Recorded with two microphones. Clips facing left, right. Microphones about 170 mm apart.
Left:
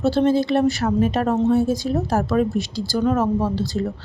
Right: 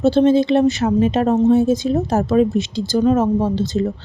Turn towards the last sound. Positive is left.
turn(degrees=-20)  # may be behind; listen again after turning